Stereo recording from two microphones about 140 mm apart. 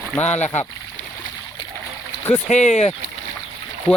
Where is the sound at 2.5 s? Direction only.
55° left (ahead or behind).